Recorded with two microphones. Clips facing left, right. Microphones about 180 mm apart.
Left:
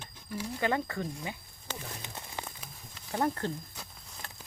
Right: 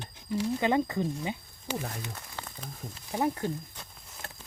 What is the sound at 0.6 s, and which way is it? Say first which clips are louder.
Speech: right 2 dB; 20° right (ahead or behind).